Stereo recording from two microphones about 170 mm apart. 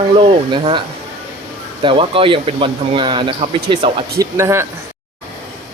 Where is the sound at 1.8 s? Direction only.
30° right (ahead or behind).